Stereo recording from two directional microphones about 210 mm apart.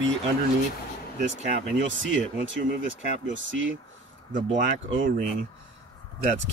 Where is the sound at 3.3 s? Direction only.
65° right (ahead or behind).